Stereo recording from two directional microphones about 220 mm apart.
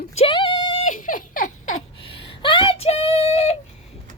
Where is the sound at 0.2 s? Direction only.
20° left (ahead or behind).